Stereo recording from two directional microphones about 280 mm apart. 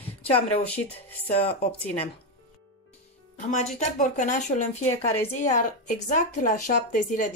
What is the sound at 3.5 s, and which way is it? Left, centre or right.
Speech, left.